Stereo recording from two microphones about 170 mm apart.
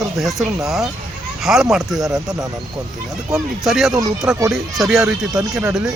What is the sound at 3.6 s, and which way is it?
Speech, centre (ahead or behind).